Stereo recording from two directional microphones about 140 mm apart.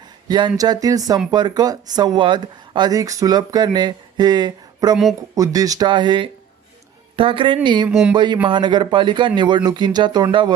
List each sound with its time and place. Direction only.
0.3 s speech: 30° right (ahead or behind)
7.9 s speech: 5° right (ahead or behind)
8.1 s speech: 30° right (ahead or behind)